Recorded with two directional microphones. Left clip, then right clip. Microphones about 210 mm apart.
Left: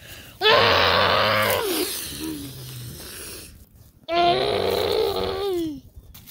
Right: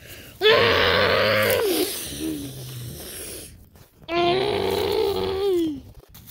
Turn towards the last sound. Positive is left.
turn(degrees=5)  # may be behind; listen again after turning